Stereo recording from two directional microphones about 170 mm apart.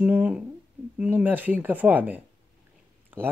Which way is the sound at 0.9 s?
10° right (ahead or behind).